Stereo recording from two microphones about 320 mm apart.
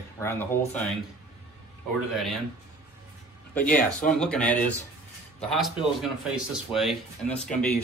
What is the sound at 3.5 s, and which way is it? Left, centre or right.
Speech, centre.